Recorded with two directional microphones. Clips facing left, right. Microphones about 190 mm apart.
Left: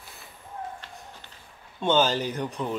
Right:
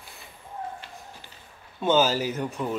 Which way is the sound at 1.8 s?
5° right (ahead or behind).